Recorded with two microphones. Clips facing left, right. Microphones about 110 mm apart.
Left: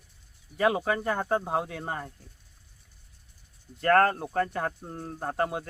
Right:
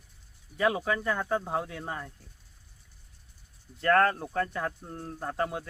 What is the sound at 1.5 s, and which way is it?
Speech, 55° left (ahead or behind).